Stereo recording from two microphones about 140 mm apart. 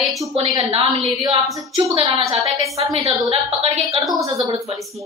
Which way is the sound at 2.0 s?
45° right (ahead or behind).